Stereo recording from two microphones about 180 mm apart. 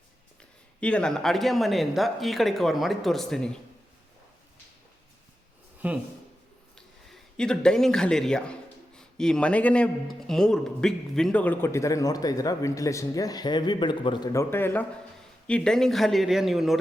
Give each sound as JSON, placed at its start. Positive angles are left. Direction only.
{"t": 0.8, "sound": "speech", "side_deg": 5}
{"t": 5.8, "sound": "speech", "side_deg": -10}
{"t": 6.7, "sound": "a man's voice", "side_deg": 5}
{"t": 14.5, "sound": "a man's voice", "side_deg": 10}